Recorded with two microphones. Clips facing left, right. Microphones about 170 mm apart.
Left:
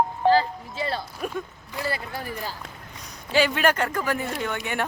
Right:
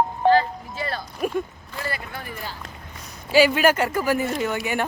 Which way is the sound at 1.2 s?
10° right (ahead or behind).